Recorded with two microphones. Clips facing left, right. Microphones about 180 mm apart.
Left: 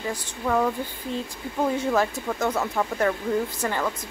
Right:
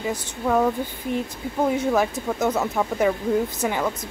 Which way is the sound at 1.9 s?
10° right (ahead or behind).